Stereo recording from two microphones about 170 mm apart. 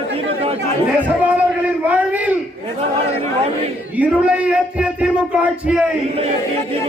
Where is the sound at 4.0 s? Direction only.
10° right (ahead or behind).